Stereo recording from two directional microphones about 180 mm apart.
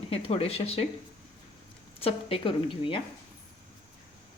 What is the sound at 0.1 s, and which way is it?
Speech, 30° left (ahead or behind).